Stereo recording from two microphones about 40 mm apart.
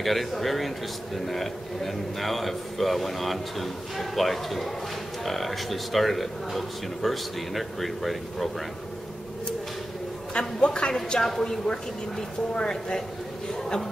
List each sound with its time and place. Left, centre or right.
0.0 s a man's voice: centre
10.6 s speech: left